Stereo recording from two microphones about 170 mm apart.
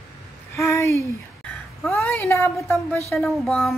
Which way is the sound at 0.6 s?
15° left (ahead or behind).